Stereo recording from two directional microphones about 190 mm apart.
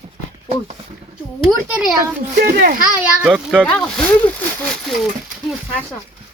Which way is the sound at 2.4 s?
45° right (ahead or behind).